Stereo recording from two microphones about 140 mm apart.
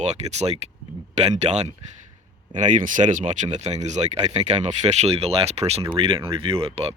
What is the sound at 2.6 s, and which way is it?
Speech, 65° right (ahead or behind).